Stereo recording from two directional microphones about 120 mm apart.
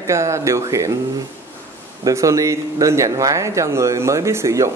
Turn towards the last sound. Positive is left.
turn(degrees=-25)  # may be behind; listen again after turning